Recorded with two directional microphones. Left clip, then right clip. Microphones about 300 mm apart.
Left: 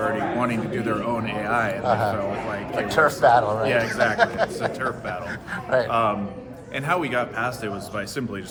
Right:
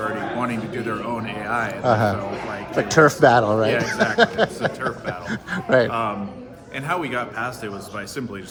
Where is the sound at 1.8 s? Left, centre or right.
Right.